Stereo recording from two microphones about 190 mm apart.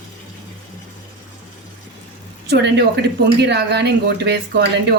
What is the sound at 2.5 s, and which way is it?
Speech, 60° right (ahead or behind).